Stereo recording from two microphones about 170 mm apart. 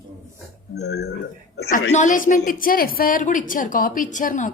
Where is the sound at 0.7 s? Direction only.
75° left (ahead or behind).